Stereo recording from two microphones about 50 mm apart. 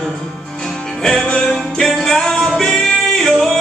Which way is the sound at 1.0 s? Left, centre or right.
Centre.